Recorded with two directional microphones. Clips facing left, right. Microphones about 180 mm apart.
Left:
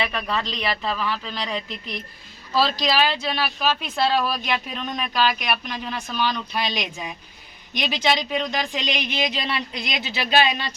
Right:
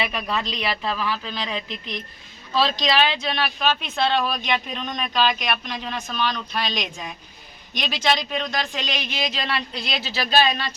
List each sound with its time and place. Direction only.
0.0 s speech: 10° right (ahead or behind); by 10.8 s 15° left (ahead or behind)